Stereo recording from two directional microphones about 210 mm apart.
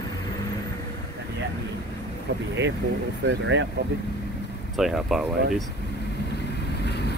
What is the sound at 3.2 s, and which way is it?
Speech, 65° right (ahead or behind).